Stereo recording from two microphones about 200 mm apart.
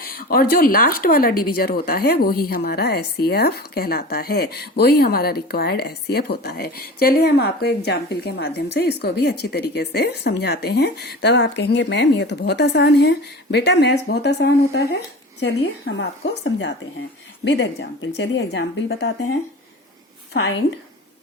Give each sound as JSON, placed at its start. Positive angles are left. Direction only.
{"t": 0.0, "sound": "speech", "side_deg": 50}
{"t": 15.6, "sound": "a woman's voice", "side_deg": 65}
{"t": 20.3, "sound": "a woman's voice", "side_deg": 65}